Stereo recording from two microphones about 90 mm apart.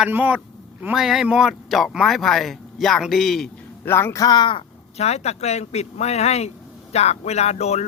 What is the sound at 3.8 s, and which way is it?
Speech, 25° left (ahead or behind).